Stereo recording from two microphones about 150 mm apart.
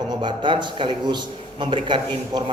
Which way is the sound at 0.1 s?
30° right (ahead or behind).